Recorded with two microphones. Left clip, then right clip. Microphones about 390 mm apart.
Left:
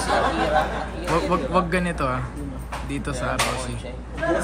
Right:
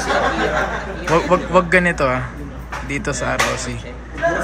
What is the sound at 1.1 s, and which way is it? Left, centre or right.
Speech, centre.